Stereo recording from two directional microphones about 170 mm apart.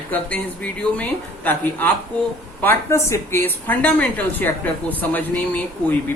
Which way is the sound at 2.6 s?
15° left (ahead or behind).